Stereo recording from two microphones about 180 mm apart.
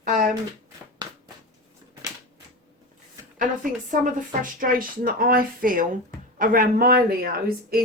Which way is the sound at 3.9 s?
50° right (ahead or behind).